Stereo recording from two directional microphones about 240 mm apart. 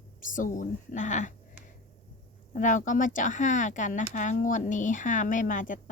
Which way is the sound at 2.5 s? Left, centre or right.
Left.